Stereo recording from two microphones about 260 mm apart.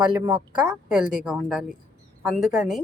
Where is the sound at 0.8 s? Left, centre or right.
Centre.